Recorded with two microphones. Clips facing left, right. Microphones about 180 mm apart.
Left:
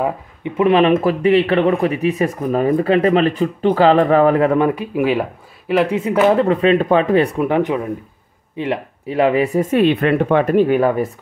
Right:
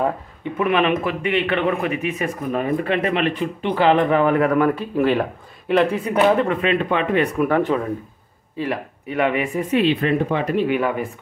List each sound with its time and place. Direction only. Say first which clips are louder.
0.6 s speech: left 6 dB; 35° left (ahead or behind); by 5.2 s 10° left (ahead or behind)
5.9 s speech: left 3 dB; 25° left (ahead or behind)
7.4 s speech: left 2 dB; 15° left (ahead or behind); by 11.1 s 40° left (ahead or behind)